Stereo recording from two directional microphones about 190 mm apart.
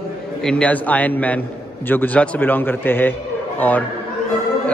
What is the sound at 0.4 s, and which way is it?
A man's voice, 5° left (ahead or behind).